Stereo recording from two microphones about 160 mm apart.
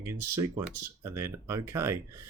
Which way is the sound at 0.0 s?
20° right (ahead or behind).